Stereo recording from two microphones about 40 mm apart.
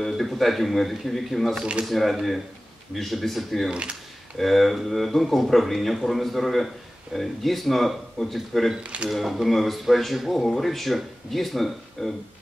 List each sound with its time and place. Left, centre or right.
0.0 s speech: centre
8.8 s speech: right
9.1 s speech: centre